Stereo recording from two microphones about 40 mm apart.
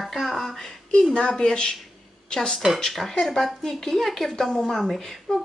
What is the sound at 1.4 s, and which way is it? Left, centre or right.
Speech, centre.